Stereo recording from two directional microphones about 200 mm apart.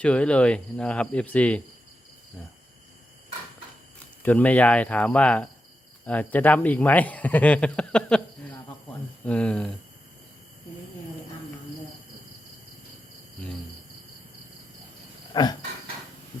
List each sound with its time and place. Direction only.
0.0 s speech: 5° left (ahead or behind)
4.2 s speech: 10° left (ahead or behind)
15.3 s a sound: 20° left (ahead or behind)